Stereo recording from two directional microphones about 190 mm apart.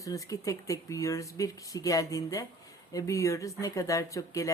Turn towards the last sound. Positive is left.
turn(degrees=15)  # may be behind; listen again after turning